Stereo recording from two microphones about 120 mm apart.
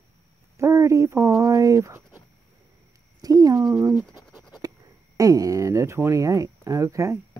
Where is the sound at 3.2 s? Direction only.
30° right (ahead or behind).